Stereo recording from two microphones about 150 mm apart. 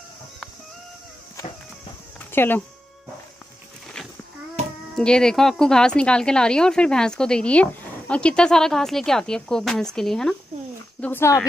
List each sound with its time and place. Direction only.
2.3 s speech: 15° left (ahead or behind)
4.9 s speech: 5° left (ahead or behind)
11.0 s speech: 15° left (ahead or behind)